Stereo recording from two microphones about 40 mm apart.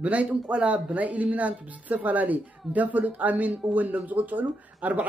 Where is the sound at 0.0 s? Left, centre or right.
Right.